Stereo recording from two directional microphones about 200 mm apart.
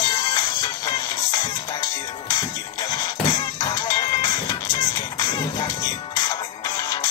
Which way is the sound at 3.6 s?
20° left (ahead or behind).